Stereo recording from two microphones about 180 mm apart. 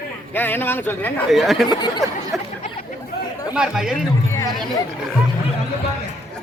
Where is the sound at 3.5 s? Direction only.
5° right (ahead or behind).